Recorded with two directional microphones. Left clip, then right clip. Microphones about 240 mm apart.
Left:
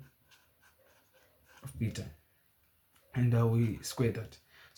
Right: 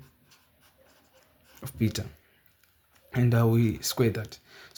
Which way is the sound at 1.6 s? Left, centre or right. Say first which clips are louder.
Right 10 dB; right.